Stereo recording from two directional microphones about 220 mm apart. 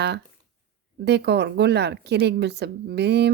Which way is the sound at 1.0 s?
50° right (ahead or behind).